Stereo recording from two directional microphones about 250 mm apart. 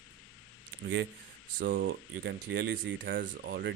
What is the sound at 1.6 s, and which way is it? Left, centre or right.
Speech, right.